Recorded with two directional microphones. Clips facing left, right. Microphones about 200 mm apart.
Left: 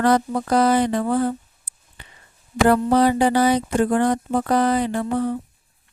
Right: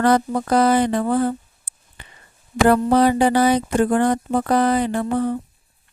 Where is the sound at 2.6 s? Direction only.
55° right (ahead or behind).